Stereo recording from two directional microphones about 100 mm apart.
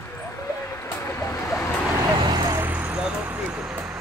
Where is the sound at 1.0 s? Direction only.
25° left (ahead or behind).